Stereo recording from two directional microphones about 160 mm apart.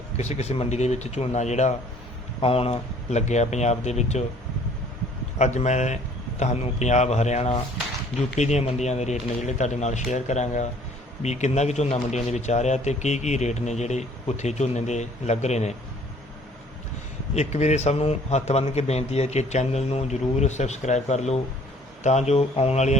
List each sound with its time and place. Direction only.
0.2 s a man's voice: 45° left (ahead or behind)
5.4 s a man's voice: 45° left (ahead or behind)
17.3 s a man's voice: 45° left (ahead or behind)